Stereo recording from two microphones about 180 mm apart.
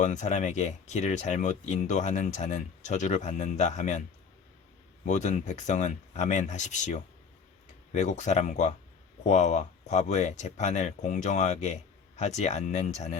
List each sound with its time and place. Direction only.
0.0 s speech: 40° left (ahead or behind)
5.0 s speech: 45° left (ahead or behind)